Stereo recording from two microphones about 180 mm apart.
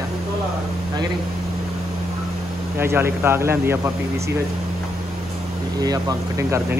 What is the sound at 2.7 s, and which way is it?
Speech, 10° right (ahead or behind).